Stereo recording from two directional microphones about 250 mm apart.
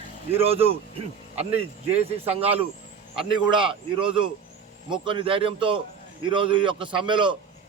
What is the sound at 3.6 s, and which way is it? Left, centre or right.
A man's voice, centre.